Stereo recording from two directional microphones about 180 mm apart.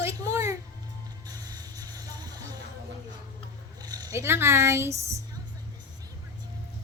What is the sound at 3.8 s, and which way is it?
Speech, 20° right (ahead or behind).